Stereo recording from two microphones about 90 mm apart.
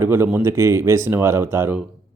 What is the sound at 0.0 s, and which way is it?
Speech, 25° right (ahead or behind).